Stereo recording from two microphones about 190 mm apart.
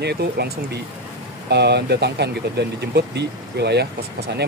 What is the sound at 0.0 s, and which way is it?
Speech, 60° right (ahead or behind).